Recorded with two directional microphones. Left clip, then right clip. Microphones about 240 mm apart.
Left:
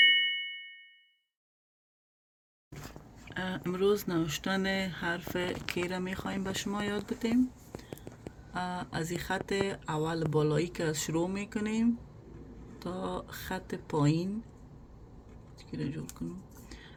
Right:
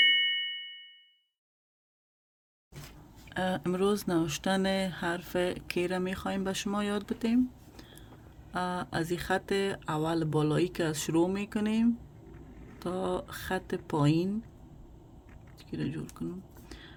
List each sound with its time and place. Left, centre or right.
0.0 s ding: centre
3.3 s speech: right
8.5 s speech: right
15.7 s speech: right
16.6 s a sound: right